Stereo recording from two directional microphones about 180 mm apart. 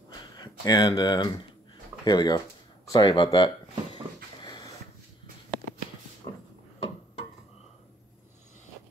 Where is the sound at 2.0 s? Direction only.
25° left (ahead or behind).